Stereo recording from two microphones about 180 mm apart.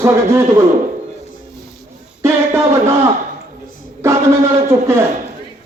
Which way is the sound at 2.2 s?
15° right (ahead or behind).